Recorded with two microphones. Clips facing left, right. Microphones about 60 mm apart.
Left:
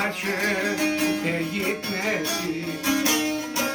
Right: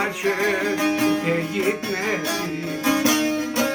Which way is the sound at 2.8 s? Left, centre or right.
Right.